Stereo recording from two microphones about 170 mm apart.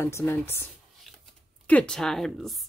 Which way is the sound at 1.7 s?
5° left (ahead or behind).